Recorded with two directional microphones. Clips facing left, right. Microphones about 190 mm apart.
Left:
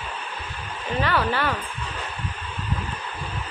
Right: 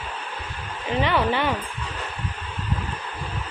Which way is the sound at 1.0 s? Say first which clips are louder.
Right 2 dB; 20° right (ahead or behind).